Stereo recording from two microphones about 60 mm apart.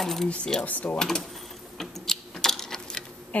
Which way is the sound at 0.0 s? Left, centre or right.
Centre.